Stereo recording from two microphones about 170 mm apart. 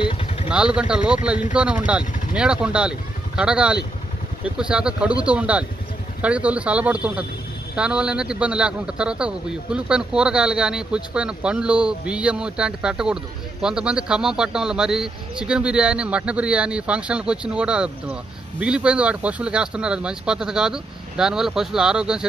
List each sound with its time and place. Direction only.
0.0 s vehicle: 35° left (ahead or behind)
0.5 s a man's voice: 5° right (ahead or behind)